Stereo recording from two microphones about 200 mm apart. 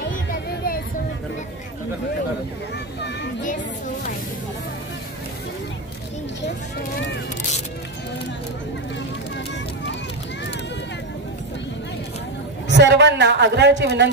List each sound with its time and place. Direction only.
12.6 s a woman's voice: 60° right (ahead or behind)